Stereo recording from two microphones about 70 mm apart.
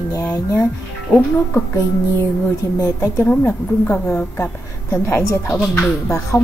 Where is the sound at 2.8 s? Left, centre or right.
Left.